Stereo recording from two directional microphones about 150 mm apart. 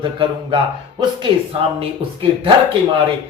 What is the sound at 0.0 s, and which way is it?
Speech, 35° right (ahead or behind).